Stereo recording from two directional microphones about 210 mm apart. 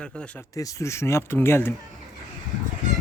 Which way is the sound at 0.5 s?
15° left (ahead or behind).